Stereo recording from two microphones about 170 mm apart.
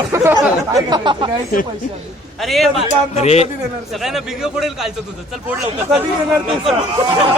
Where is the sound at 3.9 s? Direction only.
Centre (ahead or behind).